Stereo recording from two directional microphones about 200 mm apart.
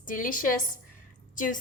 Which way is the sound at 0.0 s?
40° left (ahead or behind).